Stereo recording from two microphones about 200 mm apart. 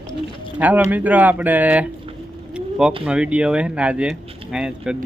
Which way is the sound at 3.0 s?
5° right (ahead or behind).